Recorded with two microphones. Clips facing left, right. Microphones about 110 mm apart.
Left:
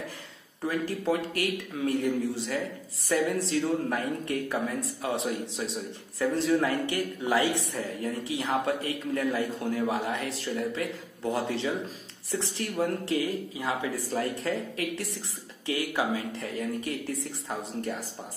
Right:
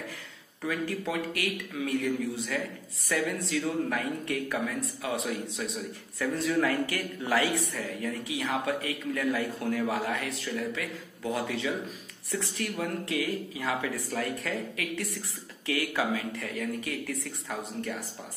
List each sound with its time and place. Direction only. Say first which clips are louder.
0.7 s speech: left 3 dB; 35° left (ahead or behind)
7.7 s speech: left 2 dB; 30° left (ahead or behind)
13.6 s speech: left 1 dB; 20° left (ahead or behind)